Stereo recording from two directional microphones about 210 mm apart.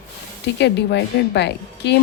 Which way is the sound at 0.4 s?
55° left (ahead or behind).